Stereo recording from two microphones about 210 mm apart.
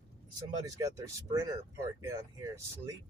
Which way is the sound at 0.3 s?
15° right (ahead or behind).